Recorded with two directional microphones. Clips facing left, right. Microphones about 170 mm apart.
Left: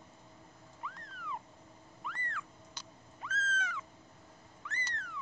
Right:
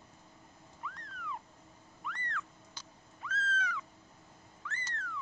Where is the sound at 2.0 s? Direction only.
5° left (ahead or behind).